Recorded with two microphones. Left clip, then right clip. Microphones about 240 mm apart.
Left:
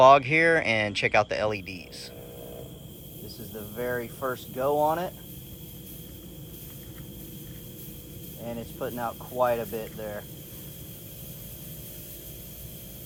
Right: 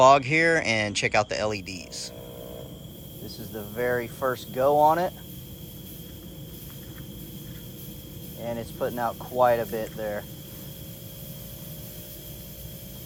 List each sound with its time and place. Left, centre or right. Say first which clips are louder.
0.0 s speech: even; centre
3.5 s speech: right 4 dB; right
8.4 s speech: right 4 dB; right